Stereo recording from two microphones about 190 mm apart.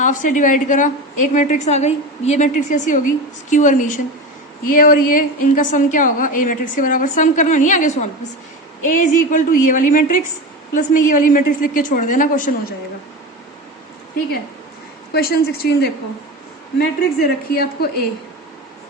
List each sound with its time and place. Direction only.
0.0 s a woman's voice: 45° left (ahead or behind)
8.9 s a woman's voice: 45° left (ahead or behind)
15.1 s a woman's voice: 55° left (ahead or behind)